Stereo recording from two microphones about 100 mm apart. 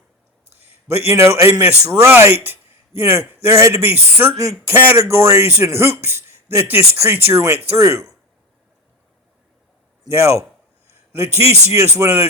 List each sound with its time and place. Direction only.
0.6 s a man's voice: 25° right (ahead or behind)
10.1 s speech: 30° right (ahead or behind)
10.8 s a sound: 20° right (ahead or behind)
11.7 s speech: 30° right (ahead or behind)